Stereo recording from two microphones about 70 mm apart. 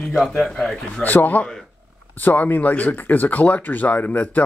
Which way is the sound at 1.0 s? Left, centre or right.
Left.